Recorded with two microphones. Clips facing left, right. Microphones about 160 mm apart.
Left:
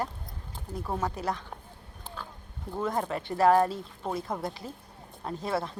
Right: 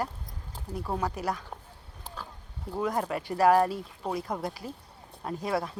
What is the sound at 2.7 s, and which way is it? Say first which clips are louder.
Speech: right 1 dB; 5° right (ahead or behind).